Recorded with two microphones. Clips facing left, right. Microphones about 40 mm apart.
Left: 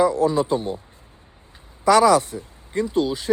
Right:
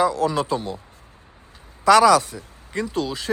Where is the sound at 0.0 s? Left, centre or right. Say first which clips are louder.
Left 2 dB; right.